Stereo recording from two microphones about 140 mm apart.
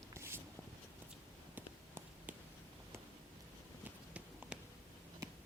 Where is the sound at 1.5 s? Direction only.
15° right (ahead or behind).